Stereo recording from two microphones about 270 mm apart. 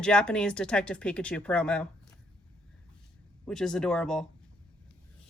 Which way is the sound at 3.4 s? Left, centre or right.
Centre.